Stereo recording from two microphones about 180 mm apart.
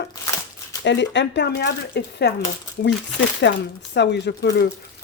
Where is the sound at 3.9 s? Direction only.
70° left (ahead or behind).